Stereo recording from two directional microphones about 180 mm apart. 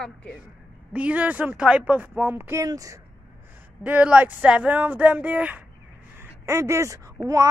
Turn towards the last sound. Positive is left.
turn(degrees=-20)  # may be behind; listen again after turning